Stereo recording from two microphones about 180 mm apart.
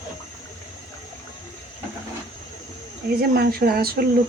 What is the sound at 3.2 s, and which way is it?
Speech, 60° right (ahead or behind).